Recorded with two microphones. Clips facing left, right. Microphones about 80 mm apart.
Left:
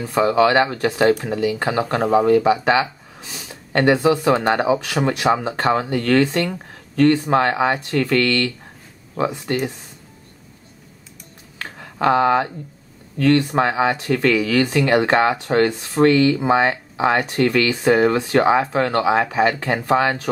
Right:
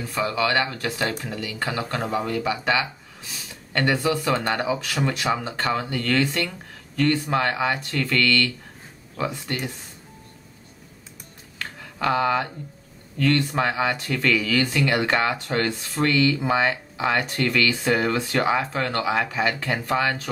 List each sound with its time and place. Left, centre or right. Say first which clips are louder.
0.3 s speech: left 8 dB; left
1.1 s speech: left 10 dB; left
5.2 s speech: left 6 dB; left
12.1 s speech: left 6 dB; left